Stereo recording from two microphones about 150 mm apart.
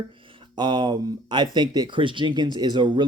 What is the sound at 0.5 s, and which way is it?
A man's voice, 30° right (ahead or behind).